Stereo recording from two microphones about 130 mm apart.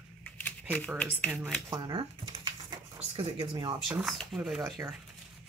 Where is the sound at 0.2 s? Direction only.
10° left (ahead or behind).